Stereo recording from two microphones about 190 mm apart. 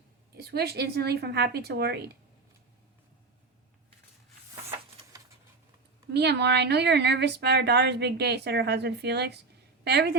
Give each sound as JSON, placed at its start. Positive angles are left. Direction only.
{"t": 0.3, "sound": "a woman's voice", "side_deg": -55}
{"t": 6.1, "sound": "a woman's voice", "side_deg": -60}